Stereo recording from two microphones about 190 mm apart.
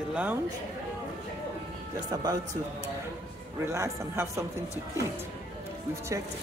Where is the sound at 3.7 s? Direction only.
15° right (ahead or behind).